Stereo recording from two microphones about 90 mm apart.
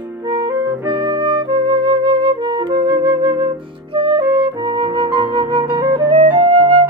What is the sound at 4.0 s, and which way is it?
Music, 60° right (ahead or behind).